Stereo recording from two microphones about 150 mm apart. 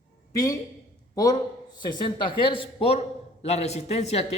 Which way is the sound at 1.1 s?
25° left (ahead or behind).